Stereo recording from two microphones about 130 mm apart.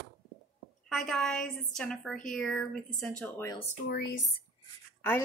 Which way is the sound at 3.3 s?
25° left (ahead or behind).